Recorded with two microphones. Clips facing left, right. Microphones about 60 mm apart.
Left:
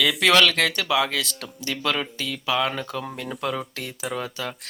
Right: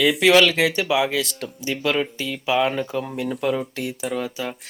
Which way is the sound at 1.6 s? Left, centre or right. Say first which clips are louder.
Right 3 dB; centre.